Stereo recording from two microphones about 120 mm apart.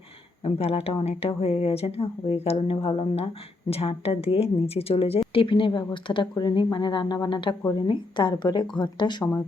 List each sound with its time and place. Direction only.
0.4 s speech: 55° left (ahead or behind)
2.8 s a woman's voice: 45° left (ahead or behind)
3.7 s a woman's voice: 55° left (ahead or behind); by 9.3 s 40° left (ahead or behind)